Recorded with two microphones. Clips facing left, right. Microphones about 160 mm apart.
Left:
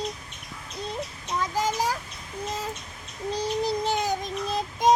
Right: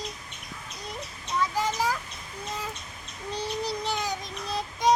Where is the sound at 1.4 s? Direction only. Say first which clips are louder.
Left 1 dB; 40° left (ahead or behind).